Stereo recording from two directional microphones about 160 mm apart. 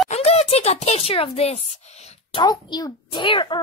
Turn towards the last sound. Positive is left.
turn(degrees=30)  # may be behind; listen again after turning